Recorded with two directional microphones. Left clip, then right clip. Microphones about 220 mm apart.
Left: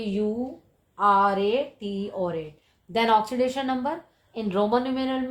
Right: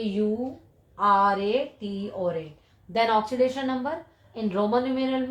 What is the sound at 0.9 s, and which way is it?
Speech, 45° left (ahead or behind).